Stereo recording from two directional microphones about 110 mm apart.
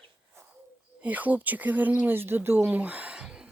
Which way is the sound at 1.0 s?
15° right (ahead or behind).